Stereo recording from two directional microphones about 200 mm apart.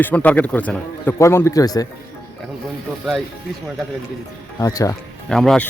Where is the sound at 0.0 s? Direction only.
10° left (ahead or behind).